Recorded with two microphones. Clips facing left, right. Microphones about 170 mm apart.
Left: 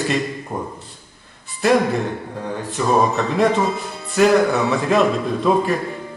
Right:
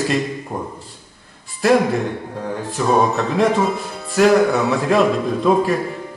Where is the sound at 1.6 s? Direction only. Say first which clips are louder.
Right 1 dB; centre (ahead or behind).